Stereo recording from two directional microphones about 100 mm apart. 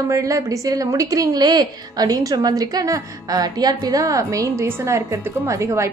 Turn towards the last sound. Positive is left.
turn(degrees=-30)  # may be behind; listen again after turning